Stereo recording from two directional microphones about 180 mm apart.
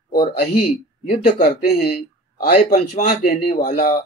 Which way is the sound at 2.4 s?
45° left (ahead or behind).